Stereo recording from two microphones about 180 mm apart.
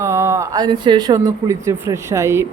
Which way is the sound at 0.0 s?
15° right (ahead or behind).